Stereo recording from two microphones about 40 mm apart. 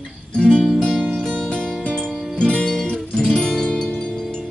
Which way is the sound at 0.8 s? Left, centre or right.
Centre.